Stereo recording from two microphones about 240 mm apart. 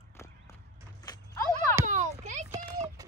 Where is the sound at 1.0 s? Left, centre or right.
Centre.